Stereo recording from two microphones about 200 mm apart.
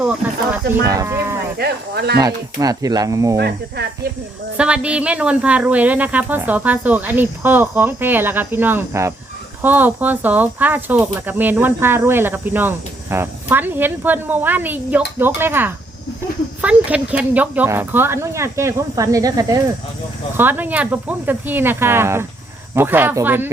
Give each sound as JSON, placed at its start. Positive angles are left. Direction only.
{"t": 0.0, "sound": "speech", "side_deg": -5}
{"t": 1.5, "sound": "speech", "side_deg": -55}
{"t": 2.1, "sound": "speech", "side_deg": -20}
{"t": 3.3, "sound": "speech", "side_deg": -55}
{"t": 4.5, "sound": "speech", "side_deg": -5}